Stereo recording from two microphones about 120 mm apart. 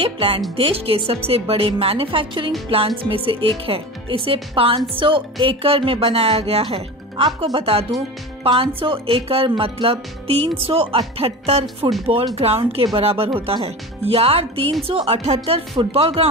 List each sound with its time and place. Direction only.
0.0 s speech: 50° right (ahead or behind)
7.3 s speech: 35° right (ahead or behind)
8.5 s speech: 50° right (ahead or behind)
11.8 s speech: 40° right (ahead or behind)
12.4 s speech: 55° right (ahead or behind)